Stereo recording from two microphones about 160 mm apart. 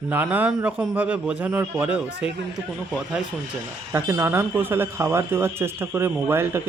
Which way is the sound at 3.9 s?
15° right (ahead or behind).